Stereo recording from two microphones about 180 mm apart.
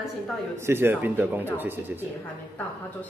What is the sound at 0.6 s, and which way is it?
A man's voice, 15° right (ahead or behind).